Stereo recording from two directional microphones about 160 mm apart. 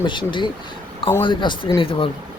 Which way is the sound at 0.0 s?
30° left (ahead or behind).